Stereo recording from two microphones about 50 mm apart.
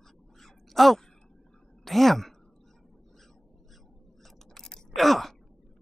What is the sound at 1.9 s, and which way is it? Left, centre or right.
Speech, centre.